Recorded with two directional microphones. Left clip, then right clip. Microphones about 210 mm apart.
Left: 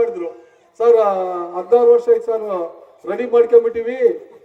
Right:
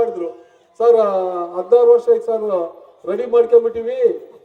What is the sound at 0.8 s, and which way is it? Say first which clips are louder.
A man's voice: even; 35° left (ahead or behind).